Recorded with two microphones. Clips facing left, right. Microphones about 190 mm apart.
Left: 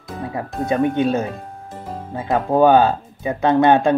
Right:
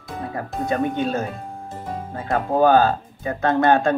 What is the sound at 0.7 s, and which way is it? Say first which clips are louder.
Speech: left 5 dB; 15° left (ahead or behind).